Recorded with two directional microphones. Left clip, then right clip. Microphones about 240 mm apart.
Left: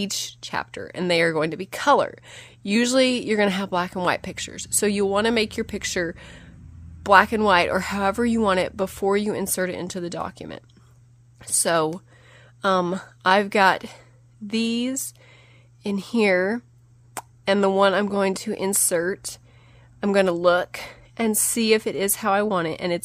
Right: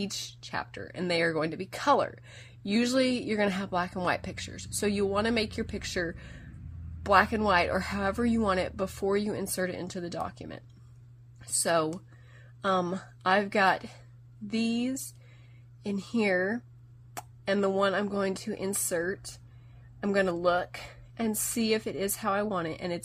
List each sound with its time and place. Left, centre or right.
0.0 s speech: left